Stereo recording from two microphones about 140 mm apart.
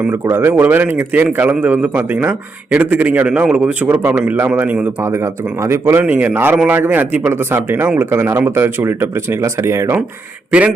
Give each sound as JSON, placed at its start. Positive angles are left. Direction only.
{"t": 0.0, "sound": "a man's voice", "side_deg": -15}